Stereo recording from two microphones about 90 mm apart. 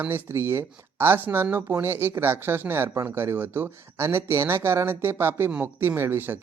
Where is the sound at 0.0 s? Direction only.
25° right (ahead or behind).